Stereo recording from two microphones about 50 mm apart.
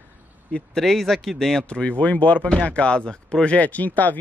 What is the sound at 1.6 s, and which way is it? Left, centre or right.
Speech, left.